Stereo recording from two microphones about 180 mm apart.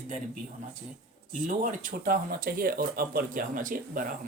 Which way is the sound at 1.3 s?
45° right (ahead or behind).